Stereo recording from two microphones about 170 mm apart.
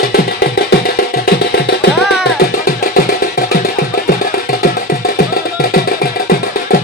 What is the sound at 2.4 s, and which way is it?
Music, 60° left (ahead or behind).